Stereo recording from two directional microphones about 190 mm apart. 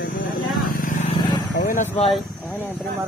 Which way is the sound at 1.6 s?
40° left (ahead or behind).